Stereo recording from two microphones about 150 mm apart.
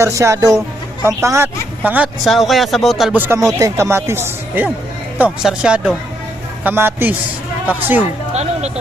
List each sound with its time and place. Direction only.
0.0 s speech: 20° right (ahead or behind)
2.2 s speech: centre (ahead or behind)
3.1 s speech: 15° right (ahead or behind)
8.3 s speech: 45° right (ahead or behind)